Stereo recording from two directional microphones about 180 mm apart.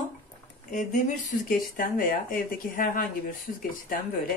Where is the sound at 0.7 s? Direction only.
45° left (ahead or behind).